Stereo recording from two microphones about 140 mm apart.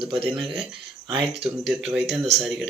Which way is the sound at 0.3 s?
5° right (ahead or behind).